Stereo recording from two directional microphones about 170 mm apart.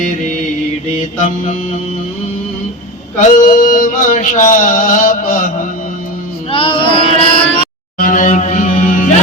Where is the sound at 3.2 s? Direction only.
50° left (ahead or behind).